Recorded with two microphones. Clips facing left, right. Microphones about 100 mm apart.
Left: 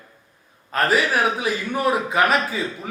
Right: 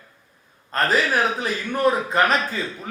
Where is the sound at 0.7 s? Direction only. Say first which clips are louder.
Left 1 dB; 5° left (ahead or behind).